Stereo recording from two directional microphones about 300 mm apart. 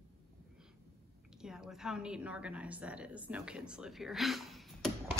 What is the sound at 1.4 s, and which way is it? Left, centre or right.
A woman's voice, centre.